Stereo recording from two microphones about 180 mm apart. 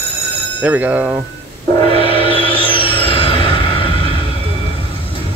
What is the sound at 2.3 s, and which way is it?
Music, 30° left (ahead or behind).